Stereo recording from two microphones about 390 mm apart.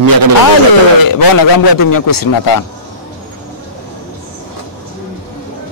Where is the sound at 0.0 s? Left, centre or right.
Right.